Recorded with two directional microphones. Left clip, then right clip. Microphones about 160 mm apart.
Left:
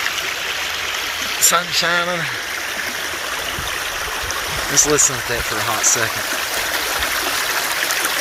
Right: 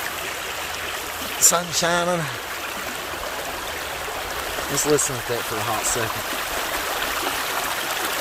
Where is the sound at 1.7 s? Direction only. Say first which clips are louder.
Left 4 dB; 25° right (ahead or behind).